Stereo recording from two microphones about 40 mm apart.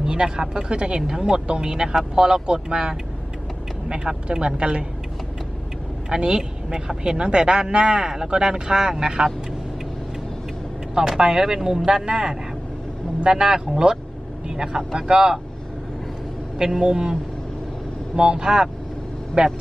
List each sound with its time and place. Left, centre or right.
0.0 s speech: centre
6.0 s speech: right
11.0 s speech: centre
16.5 s speech: centre